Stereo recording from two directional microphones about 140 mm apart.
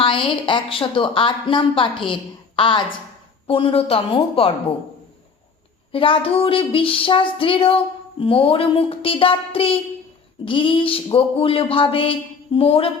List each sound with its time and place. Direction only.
0.0 s a woman's voice: 35° left (ahead or behind)
5.9 s a woman's voice: 40° left (ahead or behind)